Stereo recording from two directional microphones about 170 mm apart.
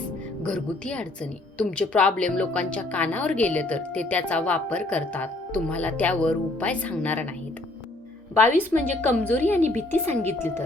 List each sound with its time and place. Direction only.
0.4 s speech: 5° left (ahead or behind)
8.4 s speech: 10° left (ahead or behind)
9.6 s a woman's voice: 45° right (ahead or behind)
9.9 s speech: 10° left (ahead or behind)